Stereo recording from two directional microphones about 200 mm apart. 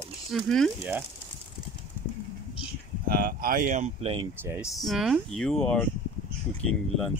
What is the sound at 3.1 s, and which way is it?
Speech, 50° right (ahead or behind).